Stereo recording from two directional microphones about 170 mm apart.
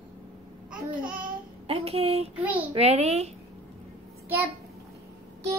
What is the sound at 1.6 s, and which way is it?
A woman's voice, 35° right (ahead or behind).